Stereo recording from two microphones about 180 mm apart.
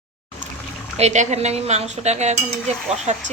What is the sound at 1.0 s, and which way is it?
Speech, 40° right (ahead or behind).